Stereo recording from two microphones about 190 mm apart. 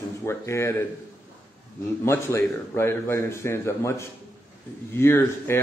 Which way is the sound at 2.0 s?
15° left (ahead or behind).